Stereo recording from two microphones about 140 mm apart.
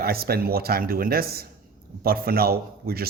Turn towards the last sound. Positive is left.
turn(degrees=-90)